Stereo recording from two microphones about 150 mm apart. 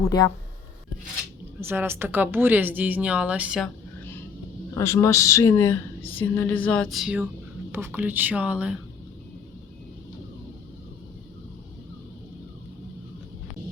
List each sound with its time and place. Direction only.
0.1 s speech: 25° left (ahead or behind)
1.6 s speech: 15° right (ahead or behind)
4.7 s speech: 20° left (ahead or behind); by 8.7 s 10° right (ahead or behind)